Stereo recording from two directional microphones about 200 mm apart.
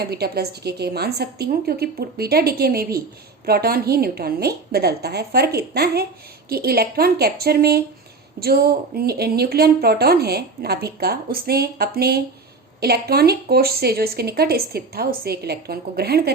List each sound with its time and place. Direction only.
0.0 s a woman's voice: 55° right (ahead or behind)